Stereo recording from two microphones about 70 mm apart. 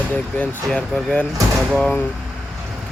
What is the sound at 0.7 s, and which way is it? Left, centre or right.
Speech, centre.